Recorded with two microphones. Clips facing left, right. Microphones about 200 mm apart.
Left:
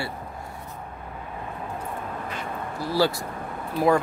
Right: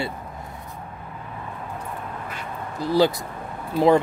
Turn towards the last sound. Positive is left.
turn(degrees=-20)  # may be behind; listen again after turning